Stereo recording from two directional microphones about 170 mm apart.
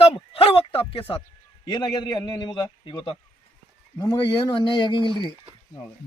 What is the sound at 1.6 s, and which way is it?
A man's voice, 25° left (ahead or behind).